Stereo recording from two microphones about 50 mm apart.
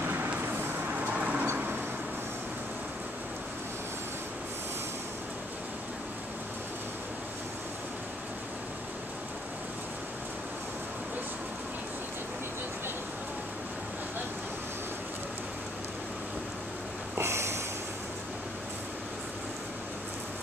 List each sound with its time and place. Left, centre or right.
0.0 s vehicle: right
1.1 s vehicle: right
1.4 s vehicle: right
17.2 s snort: right